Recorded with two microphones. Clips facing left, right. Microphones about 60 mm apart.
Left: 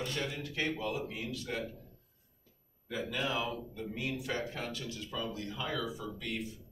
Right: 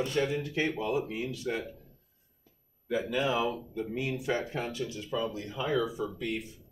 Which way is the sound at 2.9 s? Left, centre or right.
Centre.